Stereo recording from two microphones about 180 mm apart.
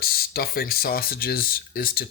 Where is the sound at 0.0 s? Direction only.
55° left (ahead or behind).